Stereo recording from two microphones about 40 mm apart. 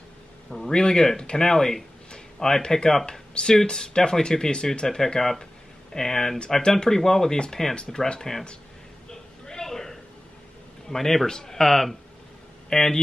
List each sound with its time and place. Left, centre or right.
0.5 s speech: centre
4.8 s speech: centre
9.1 s a sound: centre
10.9 s speech: centre